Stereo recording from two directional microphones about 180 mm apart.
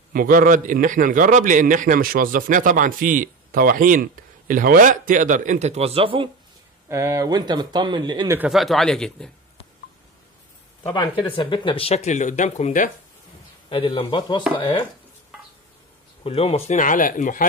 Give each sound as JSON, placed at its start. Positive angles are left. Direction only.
{"t": 0.1, "sound": "a man's voice", "side_deg": -50}
{"t": 6.9, "sound": "speech", "side_deg": -15}
{"t": 8.4, "sound": "speech", "side_deg": 0}
{"t": 10.9, "sound": "speech", "side_deg": 25}
{"t": 13.7, "sound": "a man's voice", "side_deg": 30}
{"t": 16.3, "sound": "speech", "side_deg": 35}